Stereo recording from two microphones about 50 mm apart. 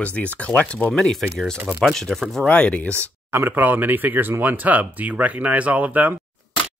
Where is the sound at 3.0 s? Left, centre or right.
Right.